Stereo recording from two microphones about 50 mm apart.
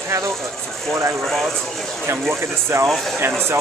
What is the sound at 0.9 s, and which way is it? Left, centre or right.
Speech, right.